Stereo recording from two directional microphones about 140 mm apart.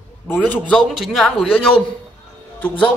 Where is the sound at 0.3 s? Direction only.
15° left (ahead or behind).